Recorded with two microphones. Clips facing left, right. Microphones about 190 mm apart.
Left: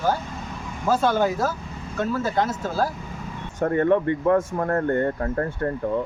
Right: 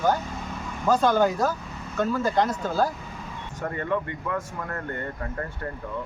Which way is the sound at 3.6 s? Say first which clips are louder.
Left 9 dB; 50° left (ahead or behind).